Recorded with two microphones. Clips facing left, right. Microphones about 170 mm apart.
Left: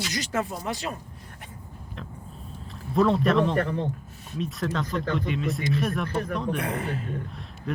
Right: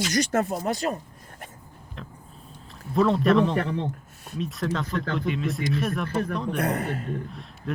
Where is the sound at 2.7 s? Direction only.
Centre (ahead or behind).